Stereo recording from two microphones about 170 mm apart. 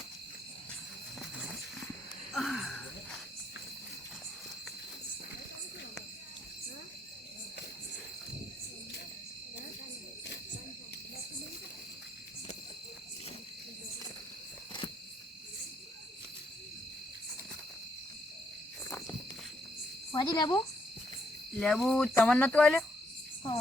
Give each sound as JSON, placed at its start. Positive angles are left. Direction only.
{"t": 1.2, "sound": "a sound", "side_deg": 0}
{"t": 2.3, "sound": "cricket", "side_deg": 0}
{"t": 18.9, "sound": "walk", "side_deg": 15}
{"t": 20.1, "sound": "speech", "side_deg": 25}
{"t": 21.5, "sound": "cricket", "side_deg": 5}
{"t": 22.1, "sound": "speech", "side_deg": 10}